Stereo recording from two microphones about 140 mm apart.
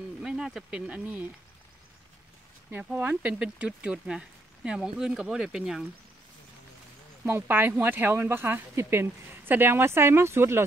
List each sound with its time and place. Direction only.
0.2 s speech: 5° right (ahead or behind)
2.7 s speech: 10° right (ahead or behind)
7.2 s speech: 15° right (ahead or behind)